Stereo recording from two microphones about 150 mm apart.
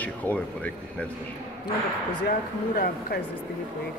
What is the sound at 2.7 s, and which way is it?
Speech, 75° left (ahead or behind).